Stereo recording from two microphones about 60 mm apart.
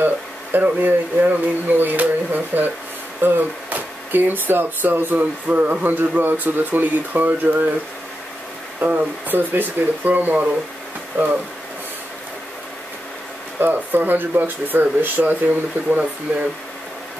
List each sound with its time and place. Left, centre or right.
0.0 s speech: right
8.7 s speech: right
11.1 s speech: right
13.6 s speech: right